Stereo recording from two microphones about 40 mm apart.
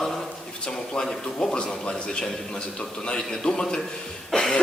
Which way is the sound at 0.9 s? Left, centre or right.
Left.